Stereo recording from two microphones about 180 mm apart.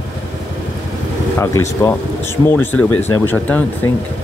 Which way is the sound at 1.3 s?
15° left (ahead or behind).